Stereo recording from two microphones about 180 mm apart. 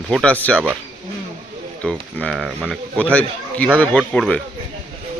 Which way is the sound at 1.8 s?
5° left (ahead or behind).